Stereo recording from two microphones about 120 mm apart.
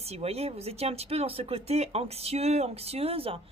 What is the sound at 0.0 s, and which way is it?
Speech, 60° right (ahead or behind).